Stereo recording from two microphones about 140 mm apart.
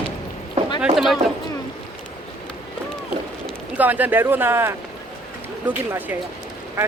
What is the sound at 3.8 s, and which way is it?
Speech, 10° right (ahead or behind).